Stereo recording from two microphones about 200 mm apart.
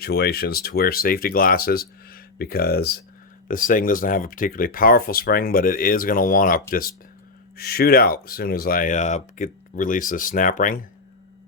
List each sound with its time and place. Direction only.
0.0 s speech: 50° left (ahead or behind)